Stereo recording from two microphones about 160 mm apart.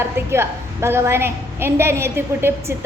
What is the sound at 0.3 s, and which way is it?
A woman's voice, 15° right (ahead or behind).